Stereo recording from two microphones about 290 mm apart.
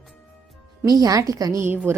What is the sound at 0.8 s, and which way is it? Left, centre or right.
Speech, centre.